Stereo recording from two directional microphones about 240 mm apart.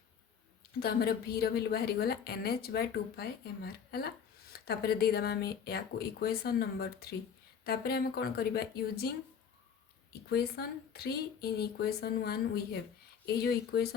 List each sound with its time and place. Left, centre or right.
0.8 s a woman's voice: left